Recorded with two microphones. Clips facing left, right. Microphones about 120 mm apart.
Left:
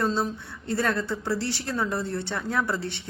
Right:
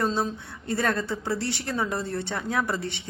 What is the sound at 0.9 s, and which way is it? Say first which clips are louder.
Speech: left 1 dB; 60° right (ahead or behind).